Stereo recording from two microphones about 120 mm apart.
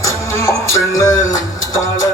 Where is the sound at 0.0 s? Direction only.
25° left (ahead or behind).